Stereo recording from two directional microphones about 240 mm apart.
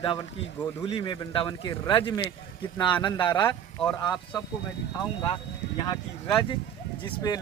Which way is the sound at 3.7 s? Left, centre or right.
Centre.